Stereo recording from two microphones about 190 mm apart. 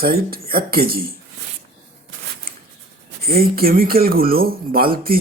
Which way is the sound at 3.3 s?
50° right (ahead or behind).